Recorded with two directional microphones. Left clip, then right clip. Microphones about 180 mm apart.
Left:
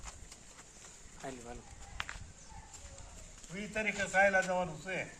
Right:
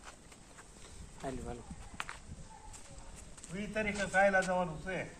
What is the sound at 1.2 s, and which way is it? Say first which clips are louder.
Speech: right 3 dB; 40° right (ahead or behind).